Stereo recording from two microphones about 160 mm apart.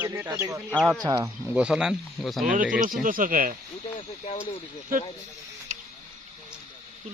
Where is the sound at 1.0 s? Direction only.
20° right (ahead or behind).